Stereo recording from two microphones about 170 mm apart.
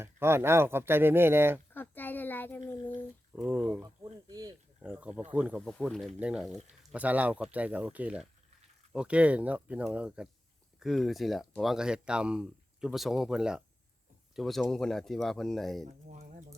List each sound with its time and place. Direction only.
0.0 s speech: 15° right (ahead or behind)
1.7 s a sound: 10° left (ahead or behind)
2.6 s speech: 10° left (ahead or behind)
3.3 s speech: 10° right (ahead or behind)
3.8 s speech: 20° right (ahead or behind)
4.8 s speech: 10° right (ahead or behind)
16.0 s a sound: 45° right (ahead or behind)